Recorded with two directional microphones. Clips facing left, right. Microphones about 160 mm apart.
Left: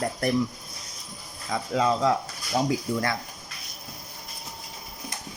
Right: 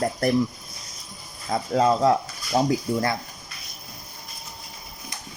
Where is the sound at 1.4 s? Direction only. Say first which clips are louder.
Right 4 dB; 45° right (ahead or behind).